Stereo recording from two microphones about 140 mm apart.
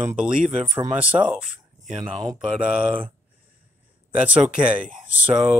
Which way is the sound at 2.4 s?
10° right (ahead or behind).